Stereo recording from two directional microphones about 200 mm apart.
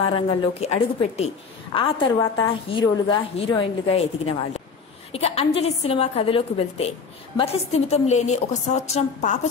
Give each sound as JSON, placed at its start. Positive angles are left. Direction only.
{"t": 0.0, "sound": "a woman's voice", "side_deg": 30}